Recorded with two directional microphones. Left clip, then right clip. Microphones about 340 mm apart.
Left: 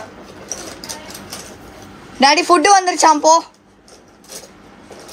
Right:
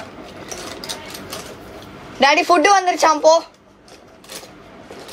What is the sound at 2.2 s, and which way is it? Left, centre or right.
A woman's voice, centre.